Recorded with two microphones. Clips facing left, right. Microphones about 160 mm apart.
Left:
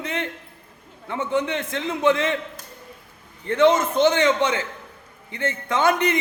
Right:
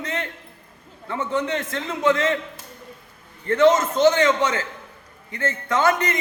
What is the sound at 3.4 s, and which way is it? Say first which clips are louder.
Speech: right 1 dB; 15° left (ahead or behind).